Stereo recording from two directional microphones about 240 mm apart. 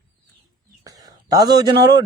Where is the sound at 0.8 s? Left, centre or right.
Centre.